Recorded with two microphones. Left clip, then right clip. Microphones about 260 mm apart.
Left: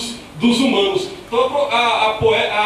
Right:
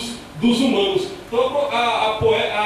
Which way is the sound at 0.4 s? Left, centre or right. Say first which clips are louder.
Left 2 dB; left.